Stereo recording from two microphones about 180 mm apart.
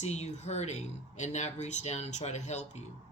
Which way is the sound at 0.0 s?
40° left (ahead or behind).